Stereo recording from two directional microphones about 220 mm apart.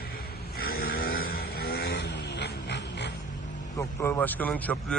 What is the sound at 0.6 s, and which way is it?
Vehicle, 45° left (ahead or behind).